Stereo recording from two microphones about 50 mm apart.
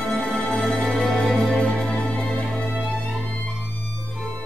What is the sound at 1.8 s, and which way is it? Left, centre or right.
Music, centre.